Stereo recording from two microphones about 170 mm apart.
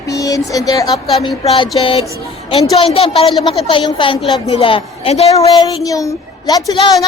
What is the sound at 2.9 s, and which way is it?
A woman's voice, 35° left (ahead or behind).